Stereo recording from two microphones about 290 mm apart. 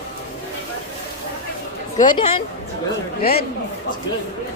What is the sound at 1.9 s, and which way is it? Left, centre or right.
Speech, centre.